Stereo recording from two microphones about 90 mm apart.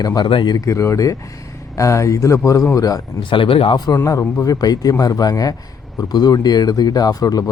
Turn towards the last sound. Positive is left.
turn(degrees=40)  # may be behind; listen again after turning